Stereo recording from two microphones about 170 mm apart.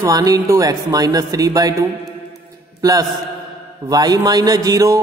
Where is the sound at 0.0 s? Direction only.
20° right (ahead or behind).